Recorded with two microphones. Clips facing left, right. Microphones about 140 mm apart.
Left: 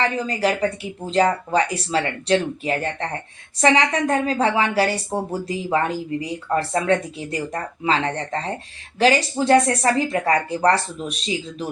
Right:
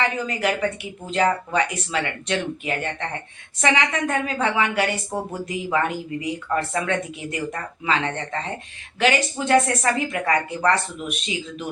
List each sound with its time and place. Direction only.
0.0 s speech: 35° left (ahead or behind)